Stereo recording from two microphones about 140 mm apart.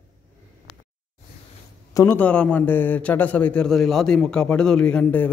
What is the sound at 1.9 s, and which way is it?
Speech, 15° left (ahead or behind).